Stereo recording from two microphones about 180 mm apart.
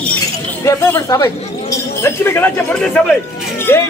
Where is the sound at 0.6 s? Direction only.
15° left (ahead or behind).